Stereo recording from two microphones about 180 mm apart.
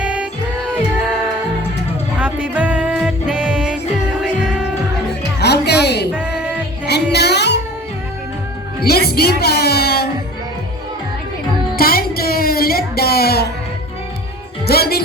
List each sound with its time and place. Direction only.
0.0 s music: 5° right (ahead or behind)
2.1 s music: 10° right (ahead or behind)
5.4 s music: 65° left (ahead or behind)
6.1 s music: 5° right (ahead or behind)
6.8 s music: 65° left (ahead or behind)
8.8 s speech: 60° left (ahead or behind)
11.8 s music: 55° left (ahead or behind)
14.7 s music: 60° left (ahead or behind)